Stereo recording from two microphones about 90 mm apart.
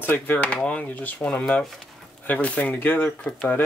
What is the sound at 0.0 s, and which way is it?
Speech, 20° left (ahead or behind).